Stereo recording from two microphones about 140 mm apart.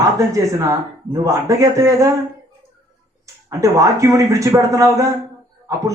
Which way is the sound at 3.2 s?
20° right (ahead or behind).